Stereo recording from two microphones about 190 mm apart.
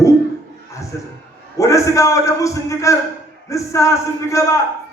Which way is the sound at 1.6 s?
15° left (ahead or behind).